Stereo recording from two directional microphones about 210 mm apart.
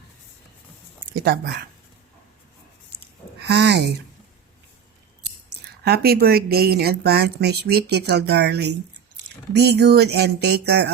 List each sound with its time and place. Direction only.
3.4 s speech: 50° right (ahead or behind)
5.8 s a woman's voice: 50° right (ahead or behind)